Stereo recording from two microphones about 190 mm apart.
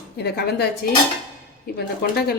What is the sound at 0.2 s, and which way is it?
A woman's voice, 55° left (ahead or behind).